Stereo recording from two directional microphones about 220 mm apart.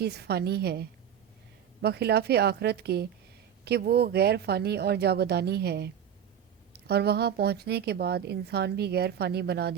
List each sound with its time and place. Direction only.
0.0 s a woman's voice: 45° right (ahead or behind)